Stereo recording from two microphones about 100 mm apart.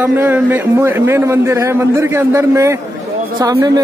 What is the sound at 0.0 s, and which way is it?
A man's voice, 20° right (ahead or behind).